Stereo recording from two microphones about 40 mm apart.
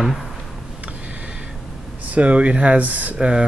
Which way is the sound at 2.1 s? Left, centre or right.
Right.